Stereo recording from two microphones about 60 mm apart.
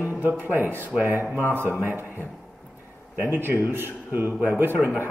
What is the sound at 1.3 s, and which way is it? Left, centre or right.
A man's voice, right.